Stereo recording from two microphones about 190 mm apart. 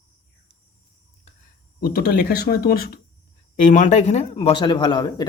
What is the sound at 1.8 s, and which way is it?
Speech, 55° left (ahead or behind).